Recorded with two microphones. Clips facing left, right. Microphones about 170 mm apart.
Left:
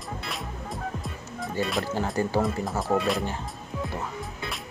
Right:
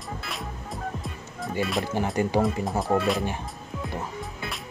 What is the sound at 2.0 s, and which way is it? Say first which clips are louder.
Speech: right 2 dB; 15° right (ahead or behind).